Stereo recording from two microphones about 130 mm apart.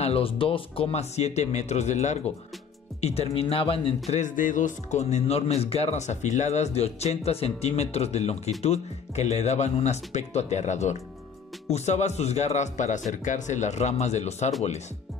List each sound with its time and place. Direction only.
0.0 s speech: 45° left (ahead or behind)
4.1 s speech: 80° left; by 14.5 s 60° left (ahead or behind)